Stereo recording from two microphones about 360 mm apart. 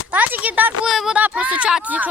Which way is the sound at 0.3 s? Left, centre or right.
Centre.